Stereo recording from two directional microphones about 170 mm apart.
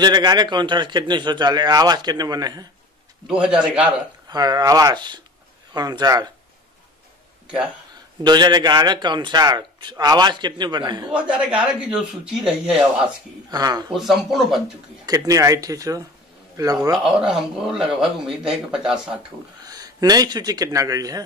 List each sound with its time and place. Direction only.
0.0 s a man's voice: 25° right (ahead or behind)
3.3 s speech: 5° right (ahead or behind)
4.3 s a man's voice: 25° right (ahead or behind)
8.2 s a man's voice: 25° right (ahead or behind)
11.1 s speech: 5° right (ahead or behind)
13.5 s a man's voice: 25° right (ahead or behind)
13.9 s speech: centre (ahead or behind)
15.0 s a man's voice: 20° right (ahead or behind)
17.2 s speech: 5° right (ahead or behind)
19.6 s speech: 20° right (ahead or behind)